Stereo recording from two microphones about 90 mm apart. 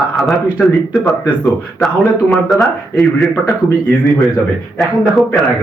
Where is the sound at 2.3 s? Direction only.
Centre (ahead or behind).